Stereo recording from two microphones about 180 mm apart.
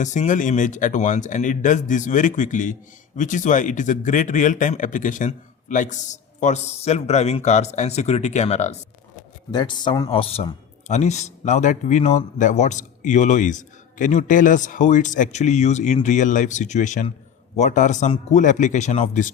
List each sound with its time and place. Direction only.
0.0 s a man's voice: 45° left (ahead or behind)
9.5 s a man's voice: 25° left (ahead or behind); by 19.3 s 45° left (ahead or behind)